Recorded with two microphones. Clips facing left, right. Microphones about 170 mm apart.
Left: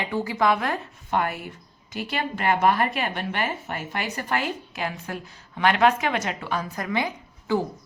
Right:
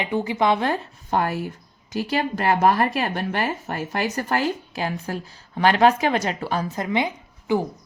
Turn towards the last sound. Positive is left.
turn(degrees=-20)  # may be behind; listen again after turning